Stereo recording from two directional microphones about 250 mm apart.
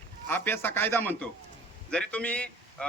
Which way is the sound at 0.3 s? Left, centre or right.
Centre.